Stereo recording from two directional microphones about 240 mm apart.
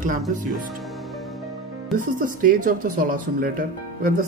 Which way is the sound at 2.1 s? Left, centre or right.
Right.